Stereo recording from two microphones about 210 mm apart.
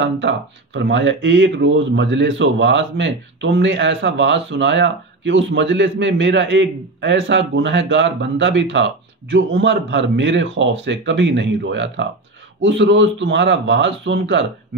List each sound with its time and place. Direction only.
0.0 s speech: 60° right (ahead or behind)